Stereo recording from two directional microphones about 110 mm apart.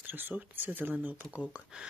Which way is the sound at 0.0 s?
20° right (ahead or behind).